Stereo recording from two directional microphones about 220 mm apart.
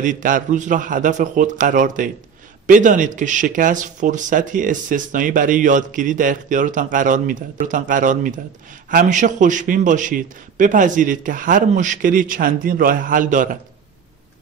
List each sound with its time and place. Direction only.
0.0 s speech: 35° right (ahead or behind)